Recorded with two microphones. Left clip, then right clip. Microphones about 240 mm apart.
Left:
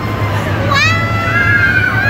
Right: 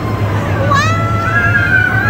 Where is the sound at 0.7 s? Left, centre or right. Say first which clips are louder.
Left 2 dB; right.